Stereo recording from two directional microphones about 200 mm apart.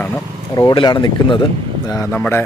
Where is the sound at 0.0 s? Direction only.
15° left (ahead or behind).